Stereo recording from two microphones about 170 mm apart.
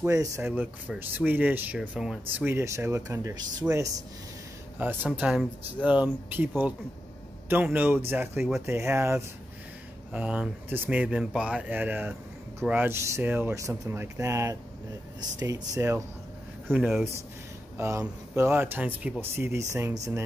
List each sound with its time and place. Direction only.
0.0 s speech: 15° right (ahead or behind)
2.4 s speech: 15° right (ahead or behind)
16.7 s speech: centre (ahead or behind)
17.7 s speech: 15° right (ahead or behind)